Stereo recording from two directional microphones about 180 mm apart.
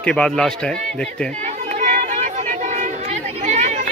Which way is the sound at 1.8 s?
50° right (ahead or behind).